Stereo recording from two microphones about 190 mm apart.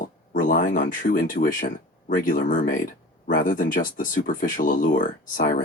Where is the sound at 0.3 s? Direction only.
45° left (ahead or behind).